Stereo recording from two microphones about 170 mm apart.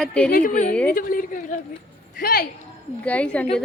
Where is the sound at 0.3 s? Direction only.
55° left (ahead or behind).